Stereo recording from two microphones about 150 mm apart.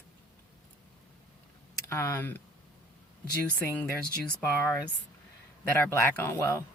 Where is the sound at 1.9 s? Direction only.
15° left (ahead or behind).